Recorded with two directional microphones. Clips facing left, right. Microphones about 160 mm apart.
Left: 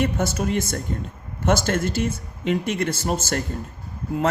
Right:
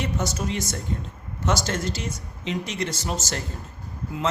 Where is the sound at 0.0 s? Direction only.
55° left (ahead or behind).